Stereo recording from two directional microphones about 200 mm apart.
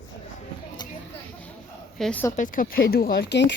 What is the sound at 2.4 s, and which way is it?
Speech, 45° left (ahead or behind).